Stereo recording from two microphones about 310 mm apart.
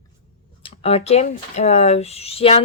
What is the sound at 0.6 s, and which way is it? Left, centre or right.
Speech, centre.